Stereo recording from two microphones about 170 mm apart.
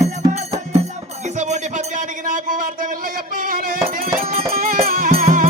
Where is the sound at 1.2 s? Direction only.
45° right (ahead or behind).